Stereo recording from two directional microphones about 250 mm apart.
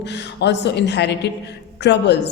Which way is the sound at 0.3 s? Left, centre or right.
Left.